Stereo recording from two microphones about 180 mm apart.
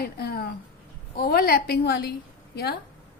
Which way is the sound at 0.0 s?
60° left (ahead or behind).